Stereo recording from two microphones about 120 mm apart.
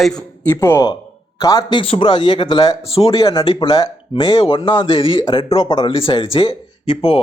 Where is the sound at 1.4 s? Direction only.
35° left (ahead or behind).